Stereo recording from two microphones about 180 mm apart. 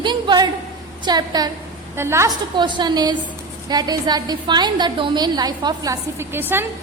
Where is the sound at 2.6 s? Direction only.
25° right (ahead or behind).